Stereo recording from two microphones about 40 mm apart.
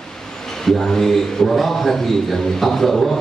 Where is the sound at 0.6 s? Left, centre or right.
Centre.